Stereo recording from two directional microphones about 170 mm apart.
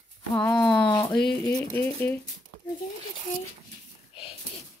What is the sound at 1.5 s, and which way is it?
Speech, 15° left (ahead or behind).